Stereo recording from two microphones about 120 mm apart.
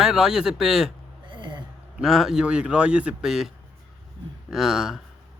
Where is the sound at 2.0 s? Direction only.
Centre (ahead or behind).